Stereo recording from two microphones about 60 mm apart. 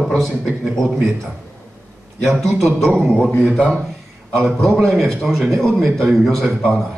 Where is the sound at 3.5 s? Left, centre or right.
Centre.